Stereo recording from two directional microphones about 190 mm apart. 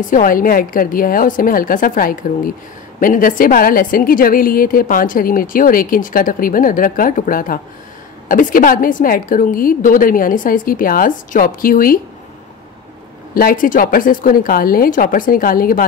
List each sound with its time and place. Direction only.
0.1 s a woman's voice: 45° left (ahead or behind)
13.3 s a woman's voice: 50° left (ahead or behind)